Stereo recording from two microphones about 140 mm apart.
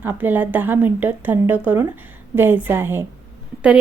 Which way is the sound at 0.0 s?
15° right (ahead or behind).